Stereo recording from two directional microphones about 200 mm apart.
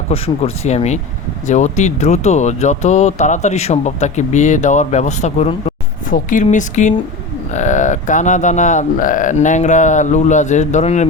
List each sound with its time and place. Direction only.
0.1 s speech: 30° left (ahead or behind)